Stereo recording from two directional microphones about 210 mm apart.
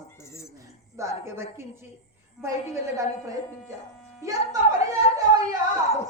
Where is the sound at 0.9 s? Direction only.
15° right (ahead or behind).